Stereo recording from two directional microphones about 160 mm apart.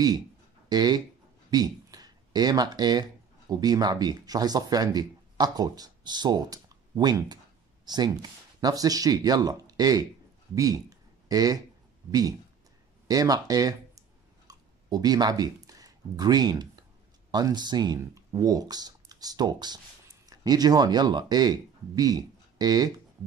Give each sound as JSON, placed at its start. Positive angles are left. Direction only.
{"t": 0.7, "sound": "speech", "side_deg": -25}
{"t": 14.5, "sound": "a sound", "side_deg": -25}
{"t": 17.3, "sound": "speech", "side_deg": -25}